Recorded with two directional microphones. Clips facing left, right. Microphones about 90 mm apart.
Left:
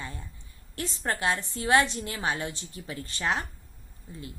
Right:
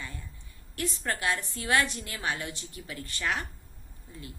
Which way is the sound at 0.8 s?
30° left (ahead or behind).